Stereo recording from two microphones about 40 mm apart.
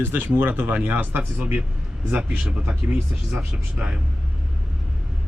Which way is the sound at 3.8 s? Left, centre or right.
Right.